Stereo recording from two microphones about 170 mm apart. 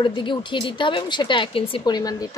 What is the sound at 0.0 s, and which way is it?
A woman's voice, 30° left (ahead or behind).